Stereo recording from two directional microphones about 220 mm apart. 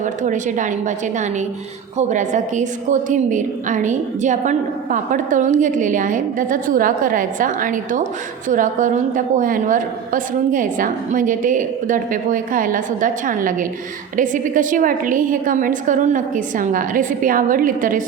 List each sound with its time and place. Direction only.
0.0 s a woman's voice: 35° right (ahead or behind)